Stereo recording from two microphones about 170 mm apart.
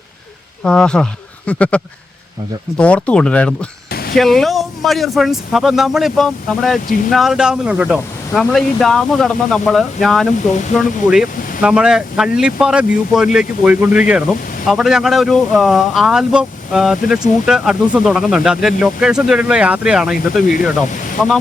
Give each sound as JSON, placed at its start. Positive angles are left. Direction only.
{"t": 0.6, "sound": "speech", "side_deg": 5}
{"t": 3.8, "sound": "a sound", "side_deg": 65}
{"t": 4.2, "sound": "speech", "side_deg": 0}